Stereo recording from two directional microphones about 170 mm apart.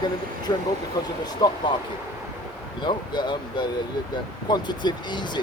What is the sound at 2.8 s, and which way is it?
Speech, 25° left (ahead or behind).